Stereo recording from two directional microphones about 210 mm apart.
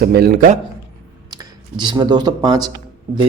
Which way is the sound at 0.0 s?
50° right (ahead or behind).